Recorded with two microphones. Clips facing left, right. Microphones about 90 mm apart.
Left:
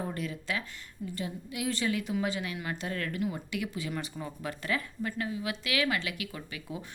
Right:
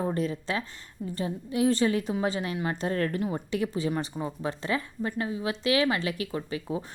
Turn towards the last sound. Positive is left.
turn(degrees=-30)  # may be behind; listen again after turning